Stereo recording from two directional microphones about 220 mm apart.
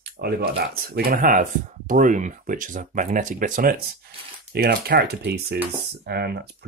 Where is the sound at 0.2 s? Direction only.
45° right (ahead or behind).